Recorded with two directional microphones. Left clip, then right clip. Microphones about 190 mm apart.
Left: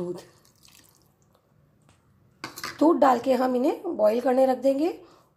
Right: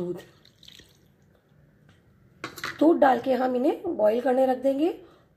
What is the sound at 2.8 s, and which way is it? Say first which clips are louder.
A woman's voice: even; 10° left (ahead or behind).